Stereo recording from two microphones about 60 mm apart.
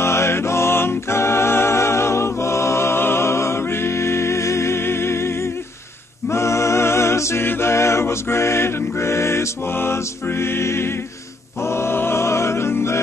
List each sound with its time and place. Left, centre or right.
0.0 s music: left